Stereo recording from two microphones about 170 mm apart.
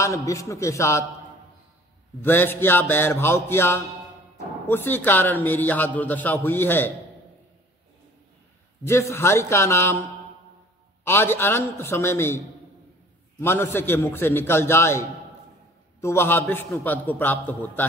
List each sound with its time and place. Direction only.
0.0 s a man's voice: 20° left (ahead or behind)
2.2 s a man's voice: 10° left (ahead or behind)
8.8 s a man's voice: 15° left (ahead or behind)
11.1 s a man's voice: 15° left (ahead or behind)
13.4 s a man's voice: 15° left (ahead or behind)